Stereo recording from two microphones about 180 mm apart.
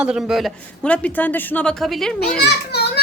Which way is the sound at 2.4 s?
65° left (ahead or behind).